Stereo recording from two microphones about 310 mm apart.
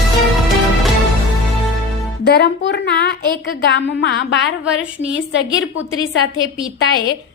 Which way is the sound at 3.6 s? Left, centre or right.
Left.